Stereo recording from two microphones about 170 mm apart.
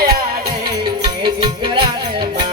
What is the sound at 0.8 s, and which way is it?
Music, 30° right (ahead or behind).